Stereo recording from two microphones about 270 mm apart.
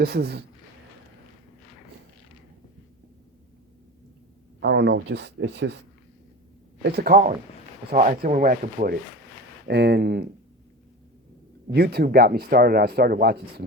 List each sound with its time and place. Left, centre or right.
0.0 s speech: right
4.6 s speech: right
6.9 s speech: right
11.7 s speech: right